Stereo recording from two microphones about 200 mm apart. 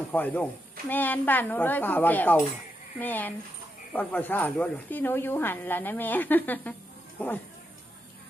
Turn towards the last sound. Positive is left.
turn(degrees=10)  # may be behind; listen again after turning